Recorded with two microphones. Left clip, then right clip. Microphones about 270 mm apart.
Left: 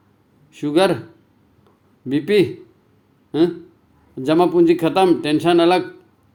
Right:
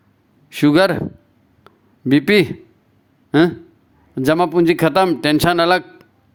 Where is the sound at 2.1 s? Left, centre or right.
Right.